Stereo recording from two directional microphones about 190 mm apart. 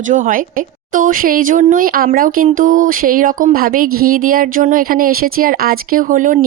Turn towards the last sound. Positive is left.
turn(degrees=-45)  # may be behind; listen again after turning